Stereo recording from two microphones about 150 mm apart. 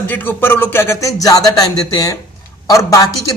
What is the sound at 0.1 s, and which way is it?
Speech, 15° left (ahead or behind).